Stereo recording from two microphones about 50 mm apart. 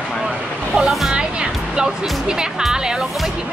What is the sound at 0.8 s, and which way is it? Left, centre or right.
Speech, centre.